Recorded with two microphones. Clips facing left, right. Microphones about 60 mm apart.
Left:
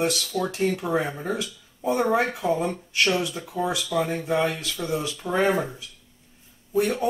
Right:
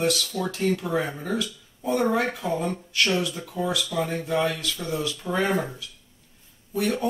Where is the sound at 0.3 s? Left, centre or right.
Centre.